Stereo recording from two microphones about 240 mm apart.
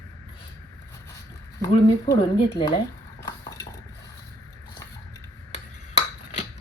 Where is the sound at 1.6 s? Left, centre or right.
Centre.